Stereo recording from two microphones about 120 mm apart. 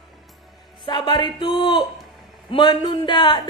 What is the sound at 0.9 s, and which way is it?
A woman's voice, 35° left (ahead or behind).